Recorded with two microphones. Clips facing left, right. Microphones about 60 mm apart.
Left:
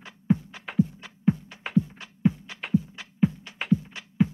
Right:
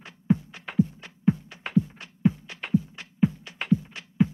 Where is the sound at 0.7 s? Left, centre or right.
Centre.